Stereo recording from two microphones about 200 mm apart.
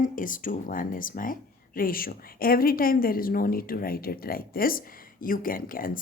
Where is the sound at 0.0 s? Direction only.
40° left (ahead or behind).